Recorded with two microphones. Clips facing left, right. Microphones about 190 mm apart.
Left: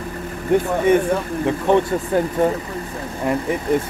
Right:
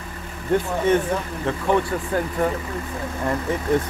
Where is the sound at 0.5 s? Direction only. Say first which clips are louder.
Left 4 dB; 15° left (ahead or behind).